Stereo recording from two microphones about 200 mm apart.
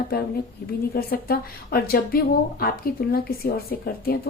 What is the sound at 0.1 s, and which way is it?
A woman's voice, 50° left (ahead or behind).